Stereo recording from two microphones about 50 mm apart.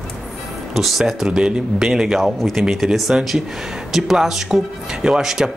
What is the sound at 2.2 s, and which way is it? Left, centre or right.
Speech, centre.